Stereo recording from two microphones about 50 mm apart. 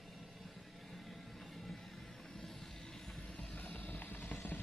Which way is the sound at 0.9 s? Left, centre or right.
Centre.